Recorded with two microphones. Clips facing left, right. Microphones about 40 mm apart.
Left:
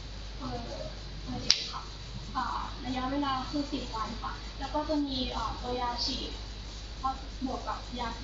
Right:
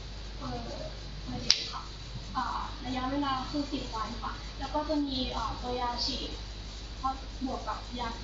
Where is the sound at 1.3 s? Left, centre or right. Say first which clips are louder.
Even; centre.